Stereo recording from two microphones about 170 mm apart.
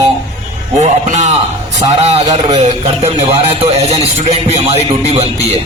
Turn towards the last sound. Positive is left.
turn(degrees=-40)  # may be behind; listen again after turning